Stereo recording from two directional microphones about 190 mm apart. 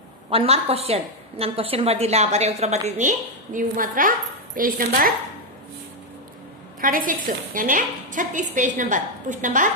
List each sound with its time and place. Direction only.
0.3 s a woman's voice: 30° right (ahead or behind); by 5.1 s 50° right (ahead or behind)
6.8 s a woman's voice: 45° right (ahead or behind)